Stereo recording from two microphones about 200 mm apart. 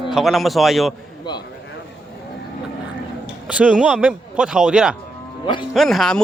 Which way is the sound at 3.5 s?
5° right (ahead or behind).